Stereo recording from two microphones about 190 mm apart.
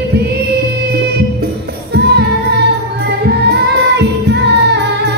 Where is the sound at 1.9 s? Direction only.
60° right (ahead or behind).